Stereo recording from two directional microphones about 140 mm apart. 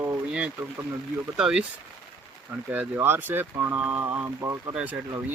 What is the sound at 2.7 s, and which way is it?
Speech, 15° right (ahead or behind).